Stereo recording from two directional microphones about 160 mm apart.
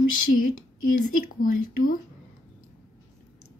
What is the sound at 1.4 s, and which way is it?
Speech, 60° left (ahead or behind).